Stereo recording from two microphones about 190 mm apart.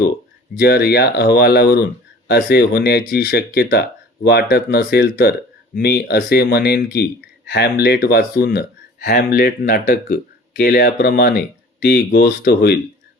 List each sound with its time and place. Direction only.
0.5 s speech: 55° left (ahead or behind)